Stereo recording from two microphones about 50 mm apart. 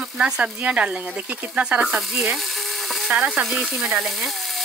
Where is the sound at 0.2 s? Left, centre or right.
Right.